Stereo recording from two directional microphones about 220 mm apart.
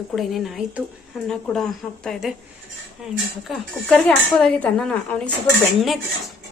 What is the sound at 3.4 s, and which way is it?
Speech, 5° left (ahead or behind).